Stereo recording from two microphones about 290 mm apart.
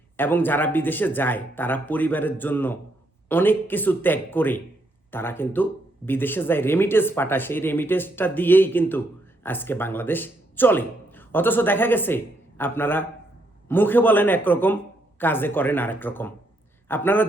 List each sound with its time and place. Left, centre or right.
0.2 s speech: centre